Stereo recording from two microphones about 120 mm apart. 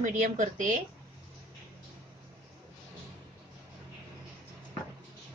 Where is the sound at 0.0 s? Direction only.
90° right.